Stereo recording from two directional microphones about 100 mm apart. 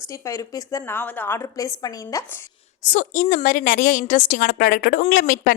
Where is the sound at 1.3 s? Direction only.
30° left (ahead or behind).